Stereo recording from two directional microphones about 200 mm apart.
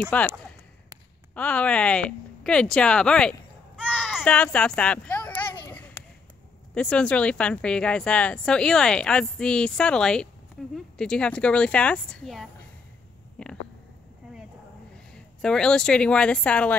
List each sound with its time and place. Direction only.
0.0 s speech: 5° left (ahead or behind)
1.3 s speech: 5° left (ahead or behind)
6.7 s speech: 5° left (ahead or behind)
13.4 s a sound: 5° left (ahead or behind)
15.4 s speech: 5° left (ahead or behind)